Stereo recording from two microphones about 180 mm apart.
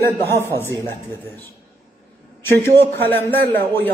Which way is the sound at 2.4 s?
10° left (ahead or behind).